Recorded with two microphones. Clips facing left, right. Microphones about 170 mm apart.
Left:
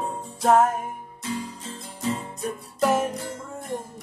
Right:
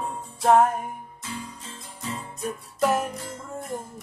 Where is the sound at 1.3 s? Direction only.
35° left (ahead or behind).